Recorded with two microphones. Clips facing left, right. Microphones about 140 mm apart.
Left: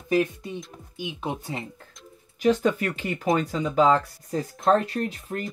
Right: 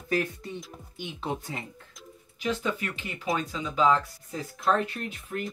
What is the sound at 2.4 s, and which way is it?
Speech, 45° left (ahead or behind).